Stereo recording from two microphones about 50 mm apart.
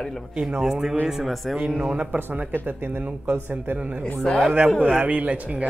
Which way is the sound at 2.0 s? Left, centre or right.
Right.